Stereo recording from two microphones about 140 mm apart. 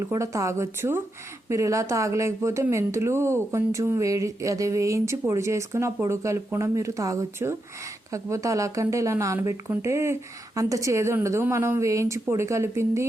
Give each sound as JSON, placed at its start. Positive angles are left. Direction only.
{"t": 0.0, "sound": "speech", "side_deg": -20}